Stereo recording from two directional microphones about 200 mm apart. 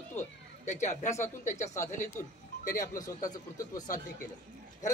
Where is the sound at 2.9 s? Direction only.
20° left (ahead or behind).